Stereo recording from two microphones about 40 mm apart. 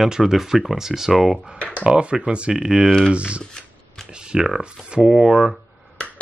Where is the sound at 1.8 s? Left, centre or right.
Right.